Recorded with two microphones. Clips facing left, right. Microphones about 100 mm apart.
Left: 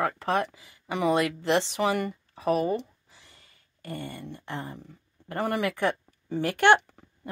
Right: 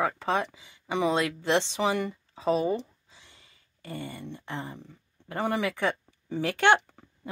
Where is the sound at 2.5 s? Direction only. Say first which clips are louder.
Left 1 dB; centre (ahead or behind).